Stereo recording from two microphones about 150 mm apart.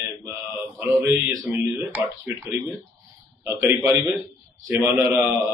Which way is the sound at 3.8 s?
15° right (ahead or behind).